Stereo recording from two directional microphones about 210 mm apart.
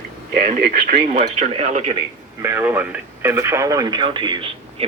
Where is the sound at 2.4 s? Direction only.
10° right (ahead or behind).